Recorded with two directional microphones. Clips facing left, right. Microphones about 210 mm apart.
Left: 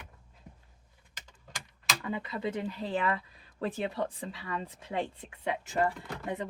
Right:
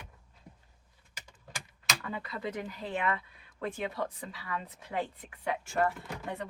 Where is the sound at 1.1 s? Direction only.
10° right (ahead or behind).